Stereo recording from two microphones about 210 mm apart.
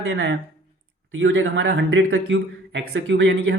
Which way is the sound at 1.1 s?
65° right (ahead or behind).